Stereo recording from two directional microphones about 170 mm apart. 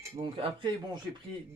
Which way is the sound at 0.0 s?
30° right (ahead or behind).